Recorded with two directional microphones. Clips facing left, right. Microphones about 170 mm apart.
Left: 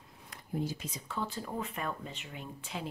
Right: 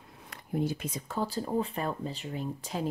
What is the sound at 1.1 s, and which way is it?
Speech, 35° right (ahead or behind).